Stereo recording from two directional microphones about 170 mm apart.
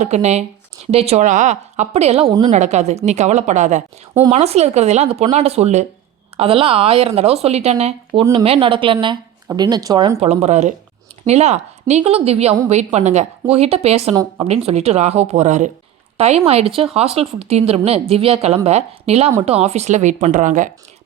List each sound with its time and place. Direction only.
0.0 s a woman's voice: 40° right (ahead or behind); by 10.2 s 25° right (ahead or behind)
10.2 s a woman's voice: 40° right (ahead or behind)